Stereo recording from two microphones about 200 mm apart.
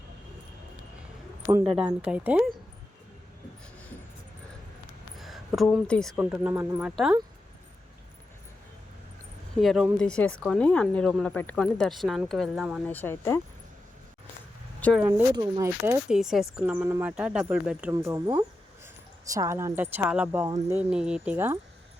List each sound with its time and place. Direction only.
1.6 s speech: 5° right (ahead or behind)
5.1 s speech: centre (ahead or behind)
9.6 s speech: centre (ahead or behind)
12.8 s speech: 10° left (ahead or behind)
15.4 s a woman's voice: 15° right (ahead or behind)
16.1 s a woman's voice: centre (ahead or behind)